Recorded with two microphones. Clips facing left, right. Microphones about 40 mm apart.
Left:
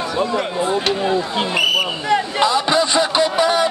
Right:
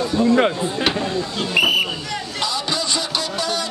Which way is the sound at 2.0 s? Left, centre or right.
Left.